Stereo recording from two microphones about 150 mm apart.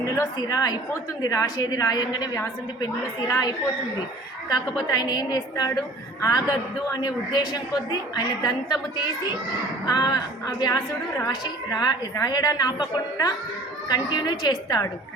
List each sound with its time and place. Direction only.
0.3 s a woman's voice: 25° left (ahead or behind)